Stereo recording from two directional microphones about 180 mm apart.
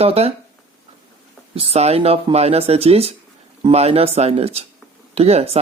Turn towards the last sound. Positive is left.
turn(degrees=-35)  # may be behind; listen again after turning